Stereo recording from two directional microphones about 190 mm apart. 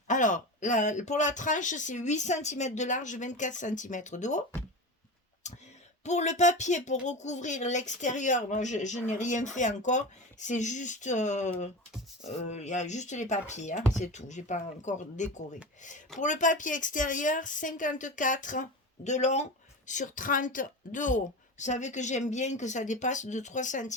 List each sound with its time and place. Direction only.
0.1 s speech: 40° left (ahead or behind)
5.5 s a sound: 35° left (ahead or behind)
6.1 s a woman's voice: 35° left (ahead or behind)